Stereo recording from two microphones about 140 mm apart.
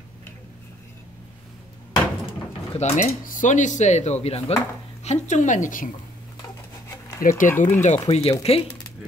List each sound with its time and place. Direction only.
2.7 s speech: 55° left (ahead or behind)
5.0 s speech: 55° left (ahead or behind)
7.2 s speech: 75° left (ahead or behind)
7.4 s speech: 15° left (ahead or behind)
8.1 s speech: 45° left (ahead or behind)